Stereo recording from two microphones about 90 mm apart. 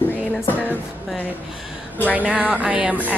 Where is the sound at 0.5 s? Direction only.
20° left (ahead or behind).